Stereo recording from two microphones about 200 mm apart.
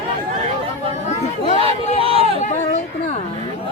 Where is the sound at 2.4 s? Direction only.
35° left (ahead or behind).